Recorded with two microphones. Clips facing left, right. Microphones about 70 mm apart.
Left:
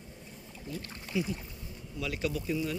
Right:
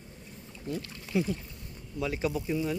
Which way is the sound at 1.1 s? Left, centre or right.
Right.